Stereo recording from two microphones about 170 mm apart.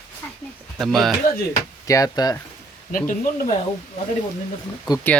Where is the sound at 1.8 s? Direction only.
20° left (ahead or behind).